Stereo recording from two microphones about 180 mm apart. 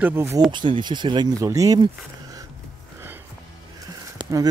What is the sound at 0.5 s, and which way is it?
Speech, 25° right (ahead or behind).